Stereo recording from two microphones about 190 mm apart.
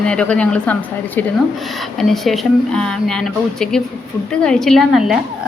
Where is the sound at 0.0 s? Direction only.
5° left (ahead or behind).